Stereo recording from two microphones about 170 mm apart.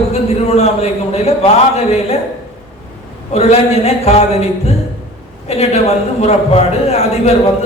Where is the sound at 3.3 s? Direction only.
35° left (ahead or behind).